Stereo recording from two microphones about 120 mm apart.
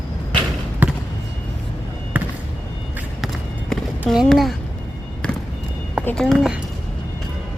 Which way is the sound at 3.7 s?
5° left (ahead or behind).